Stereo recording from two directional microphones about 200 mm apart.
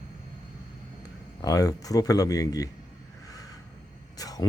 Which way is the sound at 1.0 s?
20° left (ahead or behind).